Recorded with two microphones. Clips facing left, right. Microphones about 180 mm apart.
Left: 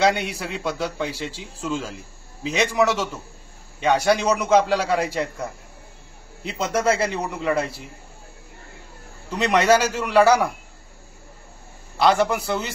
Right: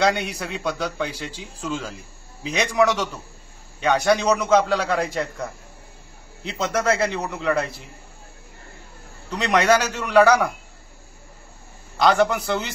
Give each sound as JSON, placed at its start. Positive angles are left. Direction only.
{"t": 0.0, "sound": "a man's voice", "side_deg": 0}
{"t": 6.7, "sound": "speech", "side_deg": 10}
{"t": 9.3, "sound": "a man's voice", "side_deg": 5}
{"t": 12.0, "sound": "a man's voice", "side_deg": 5}